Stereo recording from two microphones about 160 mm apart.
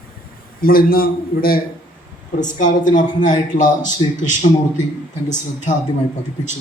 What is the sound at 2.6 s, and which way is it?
A man's voice, 55° left (ahead or behind).